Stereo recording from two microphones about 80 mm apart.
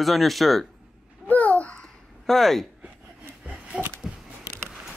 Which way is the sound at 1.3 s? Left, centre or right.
Centre.